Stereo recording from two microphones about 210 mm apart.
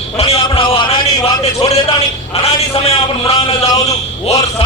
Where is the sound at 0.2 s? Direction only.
25° left (ahead or behind).